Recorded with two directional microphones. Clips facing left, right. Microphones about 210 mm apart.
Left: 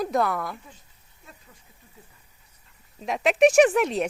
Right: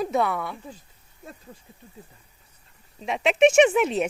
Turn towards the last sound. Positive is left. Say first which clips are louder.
# even
turn(degrees=0)  # may be behind; listen again after turning